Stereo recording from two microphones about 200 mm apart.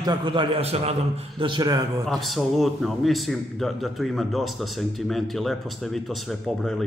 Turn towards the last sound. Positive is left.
turn(degrees=0)  # may be behind; listen again after turning